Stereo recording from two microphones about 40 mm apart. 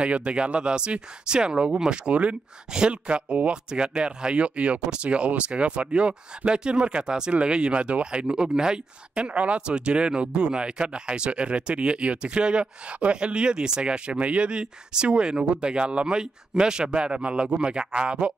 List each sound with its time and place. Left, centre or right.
0.0 s speech: right